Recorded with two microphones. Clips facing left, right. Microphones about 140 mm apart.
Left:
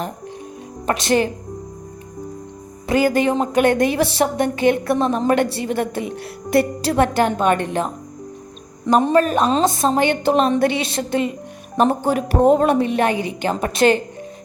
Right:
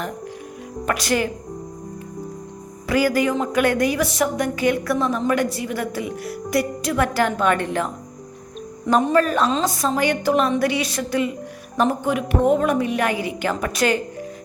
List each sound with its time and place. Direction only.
0.9 s a woman's voice: 25° left (ahead or behind)
2.8 s a woman's voice: 25° left (ahead or behind)
9.0 s a woman's voice: 25° left (ahead or behind)